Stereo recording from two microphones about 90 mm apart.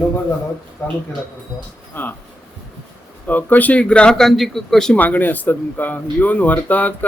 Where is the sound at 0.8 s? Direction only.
30° left (ahead or behind).